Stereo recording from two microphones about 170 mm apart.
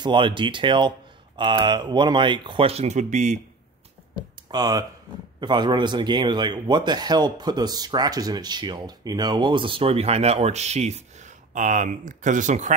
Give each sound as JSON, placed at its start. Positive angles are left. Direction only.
{"t": 0.0, "sound": "speech", "side_deg": -30}
{"t": 4.5, "sound": "speech", "side_deg": -25}